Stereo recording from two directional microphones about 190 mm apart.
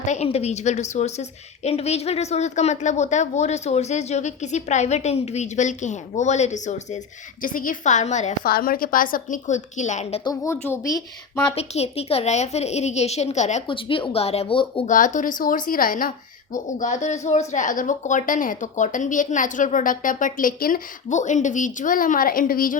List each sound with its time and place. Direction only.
0.1 s a woman's voice: 35° left (ahead or behind)
10.2 s a woman's voice: 15° left (ahead or behind)
11.5 s a woman's voice: 35° left (ahead or behind)
13.7 s speech: 25° left (ahead or behind)
14.8 s a woman's voice: 40° left (ahead or behind)